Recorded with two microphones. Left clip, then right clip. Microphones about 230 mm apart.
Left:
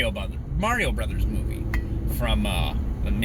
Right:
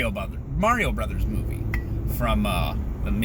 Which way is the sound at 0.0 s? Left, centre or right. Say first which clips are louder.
Left 1 dB; centre.